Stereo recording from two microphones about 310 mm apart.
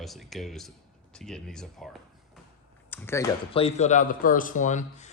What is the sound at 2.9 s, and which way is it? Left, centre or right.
Speech, centre.